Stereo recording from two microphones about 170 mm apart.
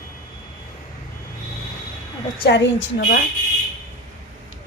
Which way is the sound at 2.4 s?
90° left.